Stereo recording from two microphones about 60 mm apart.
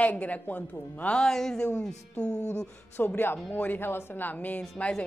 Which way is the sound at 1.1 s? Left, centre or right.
Centre.